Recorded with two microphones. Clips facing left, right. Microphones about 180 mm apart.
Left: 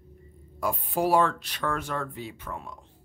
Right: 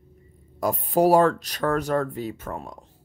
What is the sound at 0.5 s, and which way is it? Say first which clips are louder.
Speech: right 6 dB; 40° right (ahead or behind).